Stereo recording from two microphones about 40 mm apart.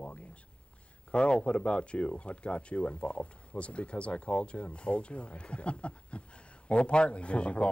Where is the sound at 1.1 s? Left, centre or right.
Left.